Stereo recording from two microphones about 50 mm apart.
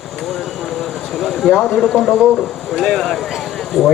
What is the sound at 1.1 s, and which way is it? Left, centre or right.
Speech, centre.